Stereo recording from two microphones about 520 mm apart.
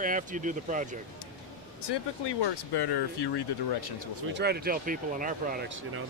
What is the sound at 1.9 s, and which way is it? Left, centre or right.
Speech, left.